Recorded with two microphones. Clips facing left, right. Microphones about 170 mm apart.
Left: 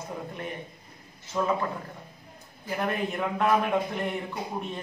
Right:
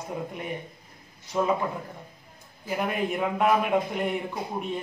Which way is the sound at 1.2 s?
15° right (ahead or behind).